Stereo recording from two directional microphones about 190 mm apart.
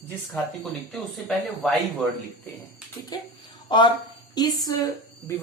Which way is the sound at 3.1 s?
20° left (ahead or behind).